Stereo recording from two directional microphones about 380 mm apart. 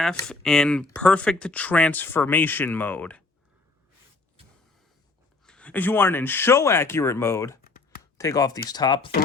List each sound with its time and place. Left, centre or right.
0.0 s speech: centre
5.5 s speech: centre
7.6 s computer keyboard: left
8.2 s speech: centre